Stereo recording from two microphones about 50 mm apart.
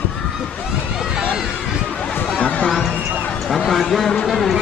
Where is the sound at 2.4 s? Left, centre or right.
Left.